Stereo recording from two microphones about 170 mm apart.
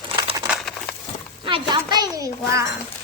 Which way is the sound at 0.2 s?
25° right (ahead or behind).